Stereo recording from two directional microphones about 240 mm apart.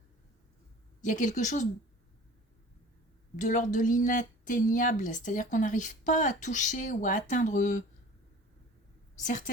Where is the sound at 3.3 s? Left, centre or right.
Left.